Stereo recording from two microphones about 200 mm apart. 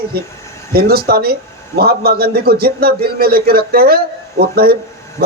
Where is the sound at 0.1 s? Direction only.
50° right (ahead or behind).